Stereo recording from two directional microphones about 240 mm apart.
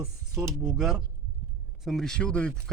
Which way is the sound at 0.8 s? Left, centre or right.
Centre.